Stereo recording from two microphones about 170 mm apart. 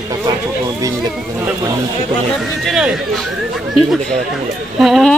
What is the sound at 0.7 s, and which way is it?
Speech, 20° right (ahead or behind).